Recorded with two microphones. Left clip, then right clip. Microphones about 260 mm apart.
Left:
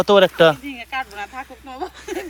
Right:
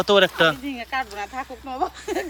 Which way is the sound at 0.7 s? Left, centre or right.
Right.